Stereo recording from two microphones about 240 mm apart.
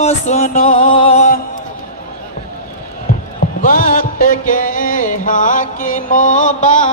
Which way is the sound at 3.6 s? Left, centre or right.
Left.